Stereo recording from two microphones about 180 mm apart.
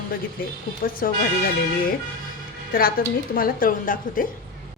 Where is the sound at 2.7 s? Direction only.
55° left (ahead or behind).